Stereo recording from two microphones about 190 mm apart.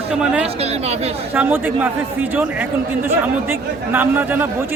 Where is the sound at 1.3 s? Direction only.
10° right (ahead or behind).